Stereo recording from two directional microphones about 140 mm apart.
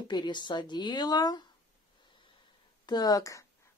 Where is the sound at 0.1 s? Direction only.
30° left (ahead or behind).